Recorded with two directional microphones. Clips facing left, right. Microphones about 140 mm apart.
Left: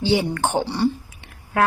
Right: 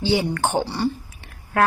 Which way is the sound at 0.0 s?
25° left (ahead or behind).